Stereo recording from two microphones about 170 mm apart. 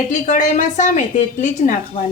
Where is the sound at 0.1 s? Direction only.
45° left (ahead or behind).